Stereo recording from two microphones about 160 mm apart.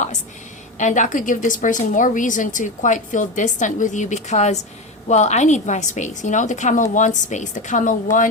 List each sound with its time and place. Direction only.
0.8 s a woman's voice: 50° left (ahead or behind)